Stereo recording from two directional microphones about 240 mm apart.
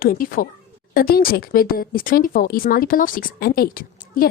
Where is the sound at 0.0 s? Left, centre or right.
Left.